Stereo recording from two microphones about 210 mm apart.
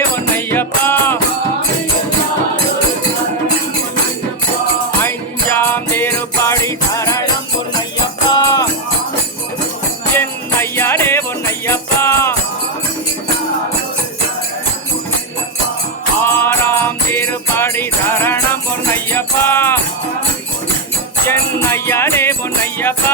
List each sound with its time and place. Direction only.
0.3 s music: 10° left (ahead or behind)
4.9 s music: 10° left (ahead or behind)
8.3 s music: 15° left (ahead or behind)
10.2 s music: 10° left (ahead or behind)
16.2 s music: 10° left (ahead or behind)
21.2 s music: 10° left (ahead or behind)